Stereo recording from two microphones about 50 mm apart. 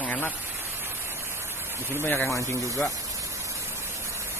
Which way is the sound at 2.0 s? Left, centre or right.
Left.